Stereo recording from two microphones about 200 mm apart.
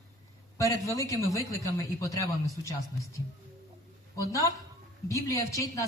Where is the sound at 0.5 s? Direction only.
15° left (ahead or behind).